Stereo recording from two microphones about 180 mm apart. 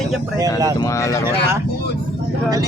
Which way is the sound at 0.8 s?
20° left (ahead or behind).